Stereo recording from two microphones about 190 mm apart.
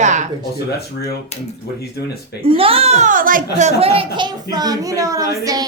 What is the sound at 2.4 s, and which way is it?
A woman's voice, 30° right (ahead or behind).